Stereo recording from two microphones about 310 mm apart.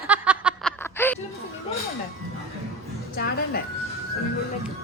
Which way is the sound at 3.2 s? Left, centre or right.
Left.